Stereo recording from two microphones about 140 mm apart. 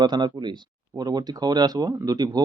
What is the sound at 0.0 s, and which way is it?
Speech, 30° right (ahead or behind).